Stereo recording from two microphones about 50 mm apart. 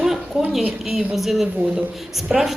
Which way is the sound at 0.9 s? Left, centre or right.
Centre.